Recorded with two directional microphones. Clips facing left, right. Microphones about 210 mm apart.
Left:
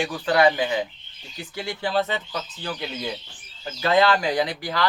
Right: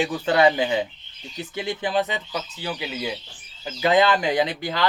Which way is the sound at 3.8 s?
20° right (ahead or behind).